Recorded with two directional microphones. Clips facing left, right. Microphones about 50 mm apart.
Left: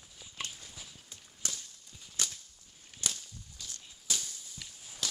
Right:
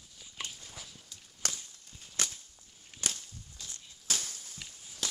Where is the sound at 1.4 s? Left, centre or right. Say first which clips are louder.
Right 3 dB; right.